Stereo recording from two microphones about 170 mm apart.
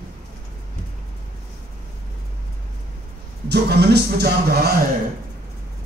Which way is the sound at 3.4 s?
70° right (ahead or behind).